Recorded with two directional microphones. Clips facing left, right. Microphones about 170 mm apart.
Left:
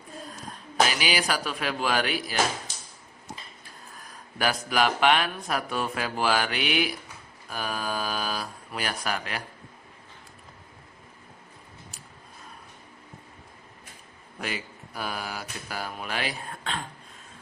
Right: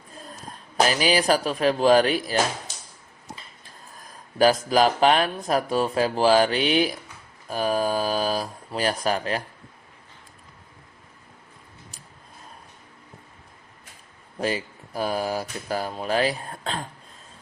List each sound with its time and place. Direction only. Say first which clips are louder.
0.9 s speech: right 7 dB; 40° right (ahead or behind)
4.4 s speech: right 7 dB; 35° right (ahead or behind)
14.3 s speech: right 8 dB; 35° right (ahead or behind)